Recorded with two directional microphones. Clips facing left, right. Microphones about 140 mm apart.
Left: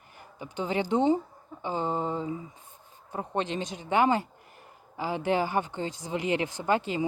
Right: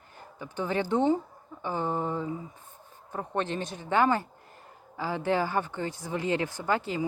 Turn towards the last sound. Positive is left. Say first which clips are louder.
# left 2 dB
turn(degrees=20)  # may be behind; listen again after turning